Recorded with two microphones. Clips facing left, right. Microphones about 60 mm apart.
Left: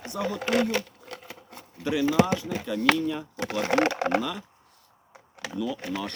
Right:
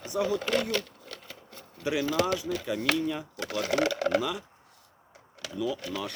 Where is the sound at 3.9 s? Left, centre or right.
Left.